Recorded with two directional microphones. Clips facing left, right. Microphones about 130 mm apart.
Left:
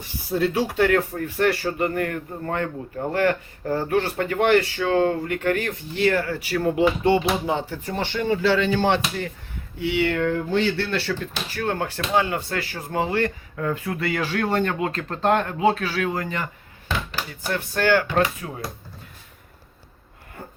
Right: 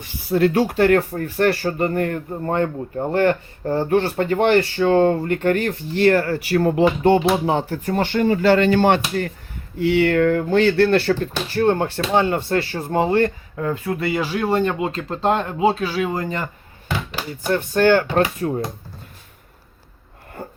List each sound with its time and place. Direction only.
0.3 s speech: 60° right (ahead or behind)
9.8 s speech: 45° right (ahead or behind)
11.5 s speech: 30° right (ahead or behind)
15.6 s speech: 30° right (ahead or behind)
15.9 s speech: 15° right (ahead or behind)
17.5 s speech: 25° right (ahead or behind)
18.4 s speech: 35° right (ahead or behind)